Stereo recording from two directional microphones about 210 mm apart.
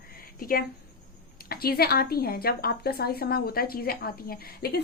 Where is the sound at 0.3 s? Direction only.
45° left (ahead or behind).